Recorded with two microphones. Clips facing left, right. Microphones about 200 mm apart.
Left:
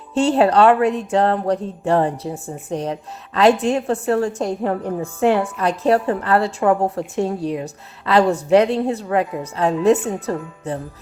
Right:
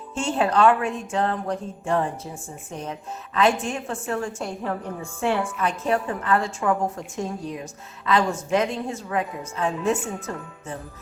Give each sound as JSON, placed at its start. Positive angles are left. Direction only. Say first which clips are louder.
{"t": 0.1, "sound": "a woman's voice", "louder": "left 8 dB", "side_deg": 35}